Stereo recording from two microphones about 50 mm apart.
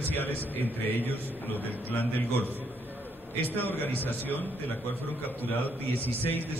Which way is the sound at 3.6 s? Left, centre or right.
Left.